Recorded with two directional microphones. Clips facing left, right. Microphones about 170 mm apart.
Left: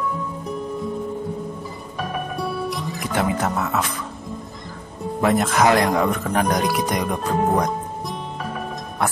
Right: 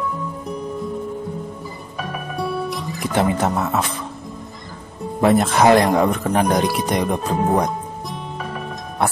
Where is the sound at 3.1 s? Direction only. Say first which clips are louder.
Right 3 dB; 25° right (ahead or behind).